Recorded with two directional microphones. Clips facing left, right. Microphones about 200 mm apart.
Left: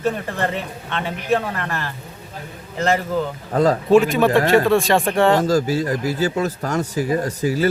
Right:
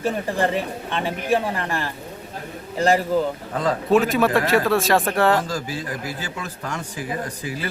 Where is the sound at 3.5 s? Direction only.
40° left (ahead or behind).